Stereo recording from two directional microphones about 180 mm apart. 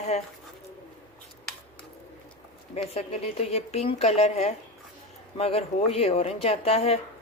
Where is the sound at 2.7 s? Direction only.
35° left (ahead or behind).